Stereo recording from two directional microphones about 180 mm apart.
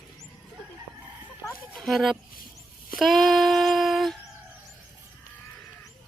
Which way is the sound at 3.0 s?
Centre (ahead or behind).